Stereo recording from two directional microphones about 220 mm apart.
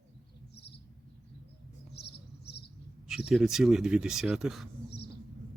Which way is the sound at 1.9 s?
50° left (ahead or behind).